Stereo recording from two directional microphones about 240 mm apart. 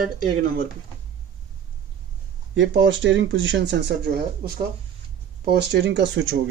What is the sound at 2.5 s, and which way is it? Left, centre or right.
Speech, right.